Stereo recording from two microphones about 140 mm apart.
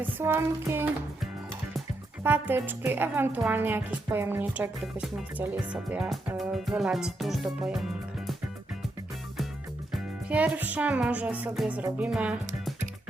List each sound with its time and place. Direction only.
0.0 s speech: 15° right (ahead or behind)
2.2 s speech: 15° right (ahead or behind)
9.9 s speech: 10° right (ahead or behind)